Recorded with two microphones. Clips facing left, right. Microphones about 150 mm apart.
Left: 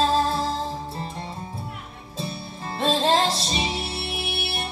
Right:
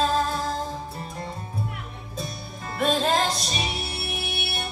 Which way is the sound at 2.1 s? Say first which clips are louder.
Left 3 dB; 30° left (ahead or behind).